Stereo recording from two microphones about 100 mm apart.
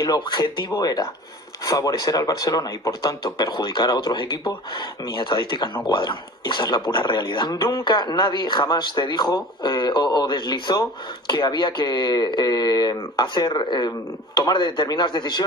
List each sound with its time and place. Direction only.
0.0 s speech: 45° left (ahead or behind)
0.7 s speech: 35° left (ahead or behind)